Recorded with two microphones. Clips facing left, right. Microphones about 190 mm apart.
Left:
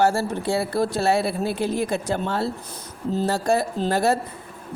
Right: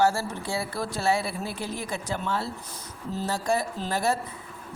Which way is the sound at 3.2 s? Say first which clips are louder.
Left 4 dB; 65° left (ahead or behind).